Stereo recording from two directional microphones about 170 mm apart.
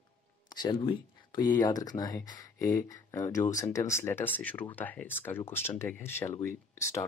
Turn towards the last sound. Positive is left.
turn(degrees=15)  # may be behind; listen again after turning